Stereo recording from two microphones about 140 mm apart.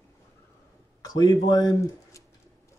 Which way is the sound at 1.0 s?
25° left (ahead or behind).